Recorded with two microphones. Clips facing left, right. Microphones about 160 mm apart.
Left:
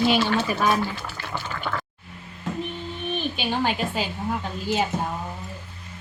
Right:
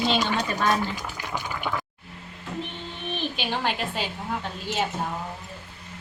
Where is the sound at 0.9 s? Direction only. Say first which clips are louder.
Even; 15° right (ahead or behind).